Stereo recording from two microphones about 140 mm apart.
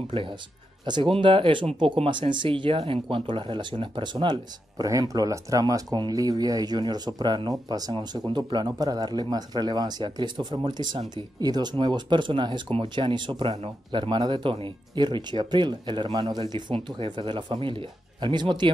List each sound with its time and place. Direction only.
0.8 s speech: 35° right (ahead or behind)